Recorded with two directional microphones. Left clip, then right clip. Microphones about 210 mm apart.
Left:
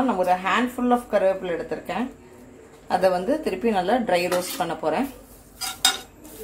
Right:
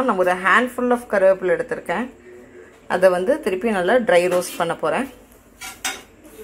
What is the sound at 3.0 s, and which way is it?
Speech, 20° right (ahead or behind).